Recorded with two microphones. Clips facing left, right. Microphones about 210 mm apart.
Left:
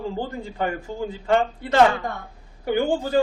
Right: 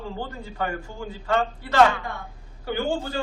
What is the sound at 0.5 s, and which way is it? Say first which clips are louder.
A man's voice: left 2 dB; 20° left (ahead or behind).